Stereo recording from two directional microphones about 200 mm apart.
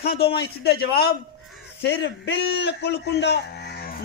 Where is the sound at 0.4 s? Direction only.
55° left (ahead or behind).